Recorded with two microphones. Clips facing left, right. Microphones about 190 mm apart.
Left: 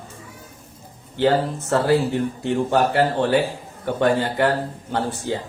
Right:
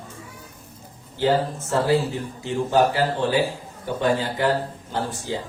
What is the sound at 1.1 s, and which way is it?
Speech, 65° left (ahead or behind).